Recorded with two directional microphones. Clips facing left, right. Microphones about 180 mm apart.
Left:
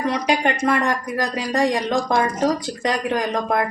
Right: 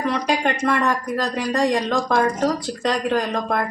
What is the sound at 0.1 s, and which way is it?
Speech, 10° left (ahead or behind).